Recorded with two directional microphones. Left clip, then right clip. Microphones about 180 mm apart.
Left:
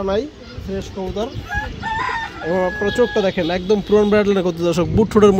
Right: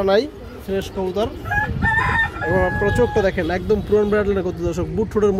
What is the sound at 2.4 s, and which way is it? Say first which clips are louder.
Speech: even; 50° left (ahead or behind).